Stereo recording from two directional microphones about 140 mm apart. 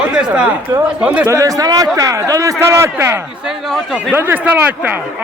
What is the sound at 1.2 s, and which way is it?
A man's voice, 25° right (ahead or behind).